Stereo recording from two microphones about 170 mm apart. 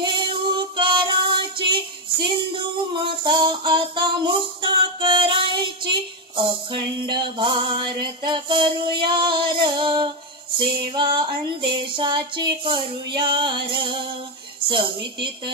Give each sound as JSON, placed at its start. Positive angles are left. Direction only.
{"t": 0.0, "sound": "music", "side_deg": -30}
{"t": 2.9, "sound": "music", "side_deg": -30}
{"t": 10.6, "sound": "female singing", "side_deg": -30}
{"t": 13.7, "sound": "music", "side_deg": -30}